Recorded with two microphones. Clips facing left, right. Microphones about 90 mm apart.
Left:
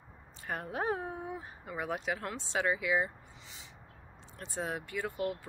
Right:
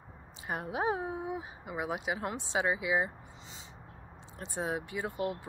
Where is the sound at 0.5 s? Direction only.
15° right (ahead or behind).